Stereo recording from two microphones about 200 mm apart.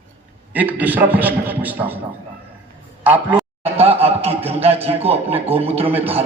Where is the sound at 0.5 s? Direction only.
10° right (ahead or behind).